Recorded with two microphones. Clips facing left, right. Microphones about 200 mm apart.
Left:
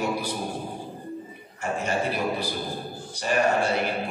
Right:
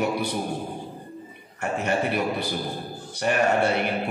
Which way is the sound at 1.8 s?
60° right (ahead or behind).